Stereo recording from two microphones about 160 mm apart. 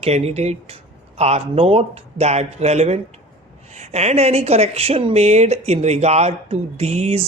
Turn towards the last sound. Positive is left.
turn(degrees=-40)  # may be behind; listen again after turning